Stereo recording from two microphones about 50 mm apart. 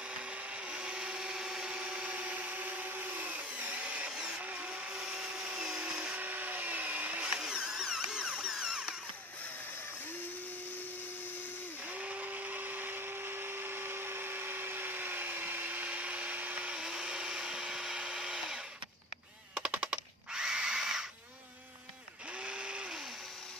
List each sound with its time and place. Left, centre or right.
0.7 s blender: right
4.4 s vehicle: right
4.6 s tools: centre
6.1 s printer: right
7.2 s tools: centre
11.9 s a sound: right
12.3 s tools: right
16.7 s tools: centre
19.5 s drill: right
22.4 s a sound: right